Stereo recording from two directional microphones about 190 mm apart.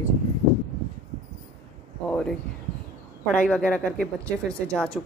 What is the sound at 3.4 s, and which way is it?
Speech, 5° left (ahead or behind).